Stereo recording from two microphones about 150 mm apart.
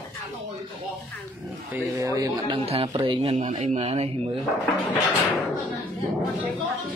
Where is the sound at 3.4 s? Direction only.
50° right (ahead or behind).